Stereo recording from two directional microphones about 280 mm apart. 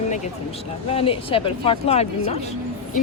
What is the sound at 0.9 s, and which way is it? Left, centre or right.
Speech, centre.